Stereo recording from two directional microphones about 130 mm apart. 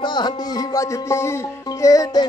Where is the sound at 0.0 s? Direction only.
35° left (ahead or behind).